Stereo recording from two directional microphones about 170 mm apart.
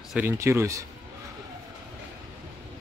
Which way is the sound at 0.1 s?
10° right (ahead or behind).